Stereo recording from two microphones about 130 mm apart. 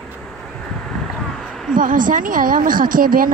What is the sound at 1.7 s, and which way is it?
A woman's voice, 90° right.